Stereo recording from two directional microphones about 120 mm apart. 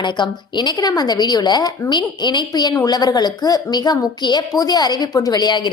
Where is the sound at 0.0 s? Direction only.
40° left (ahead or behind).